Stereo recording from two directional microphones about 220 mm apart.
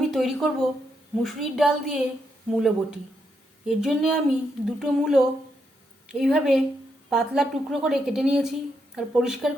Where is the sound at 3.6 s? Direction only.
Centre (ahead or behind).